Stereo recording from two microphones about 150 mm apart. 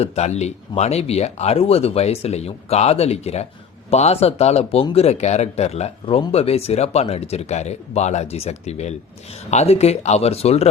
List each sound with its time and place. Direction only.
0.0 s speech: 45° left (ahead or behind)